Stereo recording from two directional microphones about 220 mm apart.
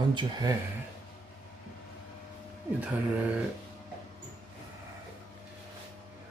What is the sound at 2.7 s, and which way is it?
Speech, 5° right (ahead or behind).